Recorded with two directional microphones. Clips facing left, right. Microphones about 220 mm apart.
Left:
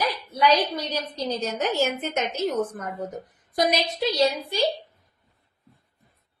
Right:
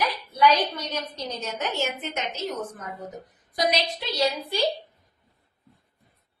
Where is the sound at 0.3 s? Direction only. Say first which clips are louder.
Even; 35° left (ahead or behind).